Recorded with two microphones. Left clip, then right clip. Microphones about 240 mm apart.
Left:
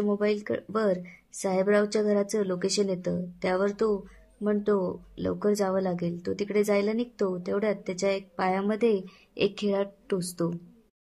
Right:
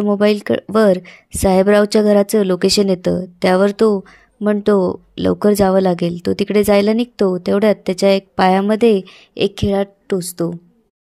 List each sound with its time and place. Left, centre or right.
0.0 s speech: right